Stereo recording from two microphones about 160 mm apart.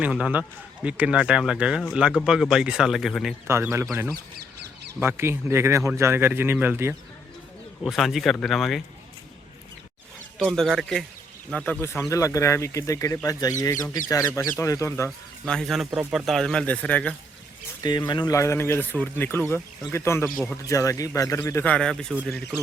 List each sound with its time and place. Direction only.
0.0 s speech: 5° right (ahead or behind)
3.4 s speech: 15° right (ahead or behind)
4.9 s speech: 15° right (ahead or behind)
7.9 s speech: centre (ahead or behind)
10.3 s speech: centre (ahead or behind); by 15.1 s 15° left (ahead or behind)
15.4 s speech: centre (ahead or behind)
17.8 s speech: 25° left (ahead or behind)
21.6 s speech: 5° left (ahead or behind)